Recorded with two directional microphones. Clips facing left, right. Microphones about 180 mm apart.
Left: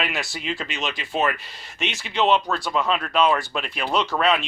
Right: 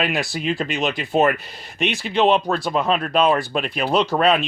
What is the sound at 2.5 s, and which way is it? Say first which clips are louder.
Speech: right 3 dB; 55° right (ahead or behind).